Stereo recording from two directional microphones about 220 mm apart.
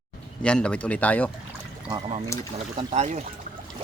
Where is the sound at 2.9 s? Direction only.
30° right (ahead or behind).